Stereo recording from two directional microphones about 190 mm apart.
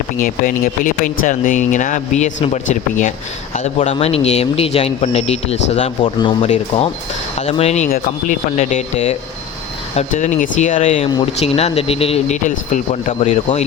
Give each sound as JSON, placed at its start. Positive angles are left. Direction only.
{"t": 0.2, "sound": "speech", "side_deg": 45}